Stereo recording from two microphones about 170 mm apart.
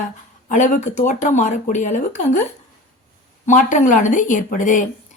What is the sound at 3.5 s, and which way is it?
A woman's voice, 50° left (ahead or behind).